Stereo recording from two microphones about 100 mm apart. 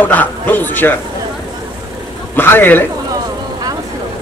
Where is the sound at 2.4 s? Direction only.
20° left (ahead or behind).